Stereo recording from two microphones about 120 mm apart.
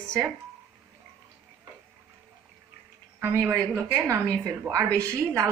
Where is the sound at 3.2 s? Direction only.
20° right (ahead or behind).